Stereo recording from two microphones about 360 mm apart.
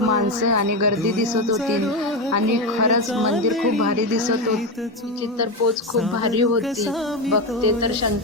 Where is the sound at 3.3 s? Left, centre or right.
Centre.